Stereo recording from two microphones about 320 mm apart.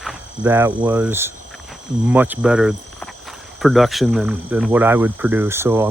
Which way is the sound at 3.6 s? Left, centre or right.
Centre.